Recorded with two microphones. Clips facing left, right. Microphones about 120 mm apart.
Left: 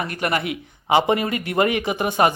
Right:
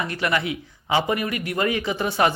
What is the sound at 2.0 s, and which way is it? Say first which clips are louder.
Speech: left 2 dB; 50° left (ahead or behind).